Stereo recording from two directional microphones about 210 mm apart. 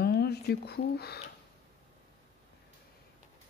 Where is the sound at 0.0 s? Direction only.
50° left (ahead or behind).